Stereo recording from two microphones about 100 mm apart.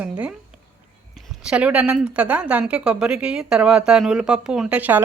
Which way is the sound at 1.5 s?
10° right (ahead or behind).